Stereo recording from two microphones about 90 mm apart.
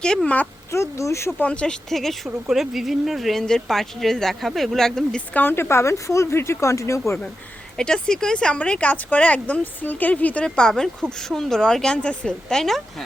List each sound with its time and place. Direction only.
0.0 s speech: 10° left (ahead or behind)
0.7 s speech: 35° left (ahead or behind)
1.4 s speech: 15° left (ahead or behind)
5.3 s speech: 20° left (ahead or behind)
7.8 s speech: 10° left (ahead or behind)